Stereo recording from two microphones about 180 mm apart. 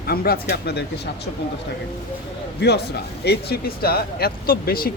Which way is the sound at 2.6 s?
65° left (ahead or behind).